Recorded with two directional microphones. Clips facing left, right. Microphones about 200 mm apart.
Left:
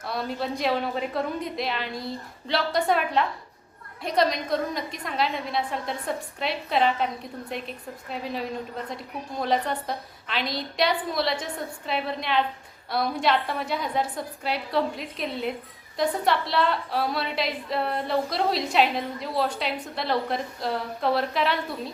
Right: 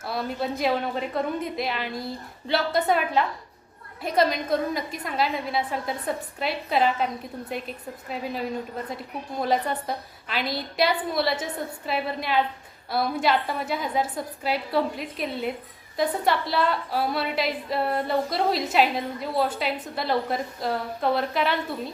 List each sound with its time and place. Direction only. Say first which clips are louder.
0.0 s a woman's voice: right 1 dB; centre (ahead or behind)